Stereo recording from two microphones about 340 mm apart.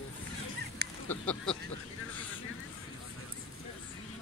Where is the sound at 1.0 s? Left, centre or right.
Centre.